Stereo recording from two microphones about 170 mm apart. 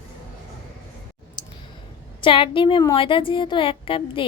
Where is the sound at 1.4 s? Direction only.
25° left (ahead or behind).